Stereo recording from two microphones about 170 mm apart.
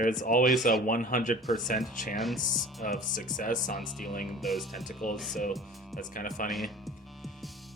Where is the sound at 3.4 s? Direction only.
50° left (ahead or behind).